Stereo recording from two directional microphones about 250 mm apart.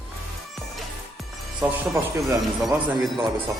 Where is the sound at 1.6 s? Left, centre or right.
Centre.